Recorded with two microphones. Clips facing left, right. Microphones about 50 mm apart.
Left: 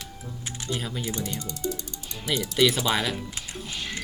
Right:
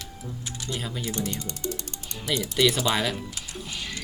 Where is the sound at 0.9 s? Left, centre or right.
Centre.